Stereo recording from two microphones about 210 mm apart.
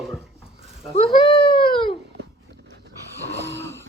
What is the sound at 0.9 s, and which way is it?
Speech, 25° left (ahead or behind).